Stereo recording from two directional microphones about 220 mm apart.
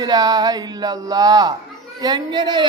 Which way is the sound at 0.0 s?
15° right (ahead or behind).